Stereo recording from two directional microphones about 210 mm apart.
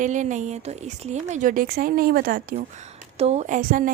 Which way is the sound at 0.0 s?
35° right (ahead or behind).